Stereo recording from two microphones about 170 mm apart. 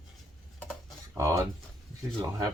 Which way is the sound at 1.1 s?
20° right (ahead or behind).